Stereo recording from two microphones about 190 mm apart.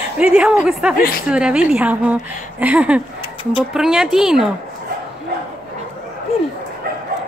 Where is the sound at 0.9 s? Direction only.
50° left (ahead or behind).